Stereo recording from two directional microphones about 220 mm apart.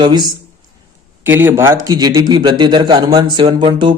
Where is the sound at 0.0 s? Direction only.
20° right (ahead or behind).